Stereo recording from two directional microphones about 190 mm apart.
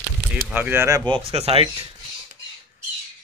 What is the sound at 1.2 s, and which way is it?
Speech, 30° right (ahead or behind).